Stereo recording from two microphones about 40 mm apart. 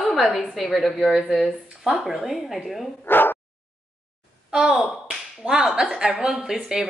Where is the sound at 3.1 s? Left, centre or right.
Left.